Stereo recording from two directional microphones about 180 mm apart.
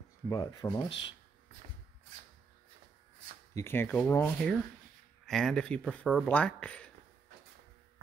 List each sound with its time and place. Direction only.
0.3 s speech: 20° left (ahead or behind)
3.5 s speech: 15° left (ahead or behind)